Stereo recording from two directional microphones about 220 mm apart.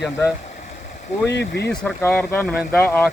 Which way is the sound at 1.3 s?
50° left (ahead or behind).